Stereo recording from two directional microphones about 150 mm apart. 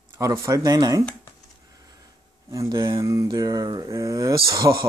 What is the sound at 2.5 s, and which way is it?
Speech, 25° right (ahead or behind).